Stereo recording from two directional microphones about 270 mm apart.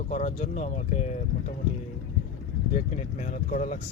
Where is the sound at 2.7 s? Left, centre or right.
Left.